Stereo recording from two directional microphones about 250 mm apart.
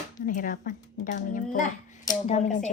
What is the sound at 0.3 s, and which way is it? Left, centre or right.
Speech, left.